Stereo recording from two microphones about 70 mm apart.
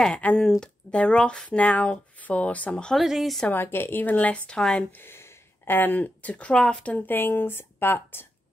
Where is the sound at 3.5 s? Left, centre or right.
Left; by 4.8 s centre.